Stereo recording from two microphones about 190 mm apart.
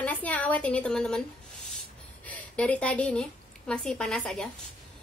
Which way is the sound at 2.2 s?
5° left (ahead or behind).